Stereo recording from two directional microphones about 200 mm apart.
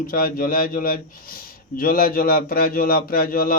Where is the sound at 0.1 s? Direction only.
45° left (ahead or behind).